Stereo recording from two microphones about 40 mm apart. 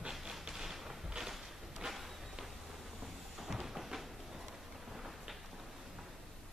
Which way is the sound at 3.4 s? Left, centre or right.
Centre.